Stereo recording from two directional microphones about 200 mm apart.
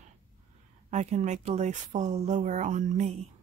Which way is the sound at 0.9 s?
35° right (ahead or behind).